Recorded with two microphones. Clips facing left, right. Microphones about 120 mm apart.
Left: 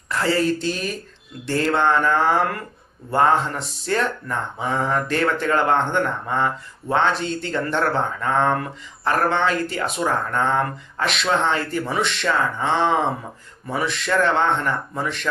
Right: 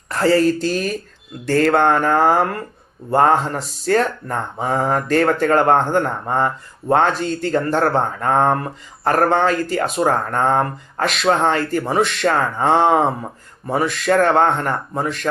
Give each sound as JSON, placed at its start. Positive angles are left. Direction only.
{"t": 0.1, "sound": "speech", "side_deg": -40}